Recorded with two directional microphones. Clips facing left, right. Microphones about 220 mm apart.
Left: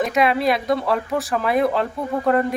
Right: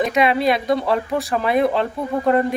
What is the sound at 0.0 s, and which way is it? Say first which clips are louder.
Speech: right 1 dB; centre (ahead or behind).